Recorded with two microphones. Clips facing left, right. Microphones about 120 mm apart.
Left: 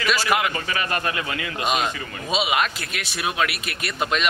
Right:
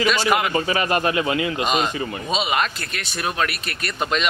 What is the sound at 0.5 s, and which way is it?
Speech, 25° right (ahead or behind).